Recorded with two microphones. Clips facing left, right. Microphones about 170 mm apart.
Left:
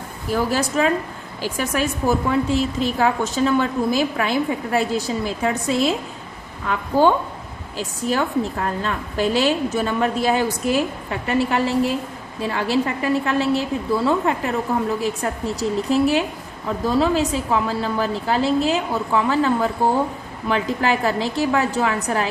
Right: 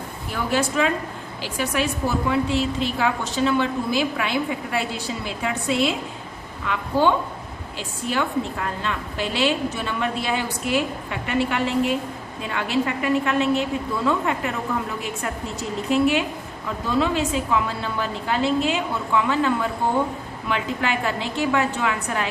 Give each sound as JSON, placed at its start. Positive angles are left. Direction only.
{"t": 0.3, "sound": "a woman's voice", "side_deg": 40}